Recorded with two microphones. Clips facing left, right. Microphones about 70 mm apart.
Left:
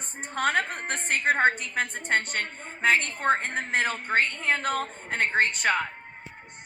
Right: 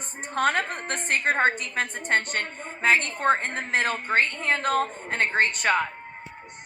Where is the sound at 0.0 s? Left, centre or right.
Centre.